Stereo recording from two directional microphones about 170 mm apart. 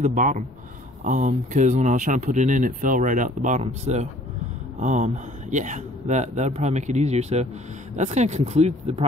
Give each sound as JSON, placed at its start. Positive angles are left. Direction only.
{"t": 0.0, "sound": "speech", "side_deg": -50}